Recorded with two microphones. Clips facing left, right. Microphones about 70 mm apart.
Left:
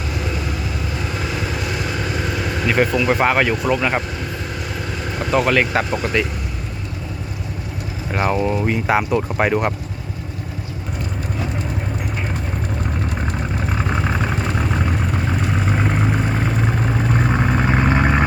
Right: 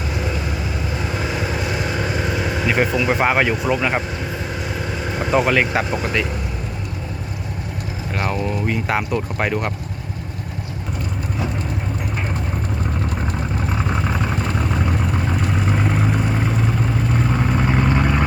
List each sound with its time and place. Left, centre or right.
0.1 s vehicle: centre
4.9 s speech: centre
8.1 s speech: left
8.6 s speech: centre
13.7 s vehicle: centre
17.1 s vehicle: left